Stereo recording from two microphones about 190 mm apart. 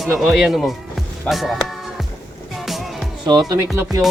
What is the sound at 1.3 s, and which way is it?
Music, centre (ahead or behind).